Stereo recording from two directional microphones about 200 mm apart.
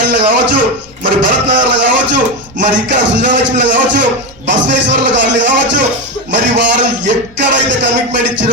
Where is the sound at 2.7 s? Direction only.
60° right (ahead or behind).